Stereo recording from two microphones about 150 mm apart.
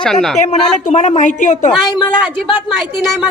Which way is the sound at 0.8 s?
50° left (ahead or behind).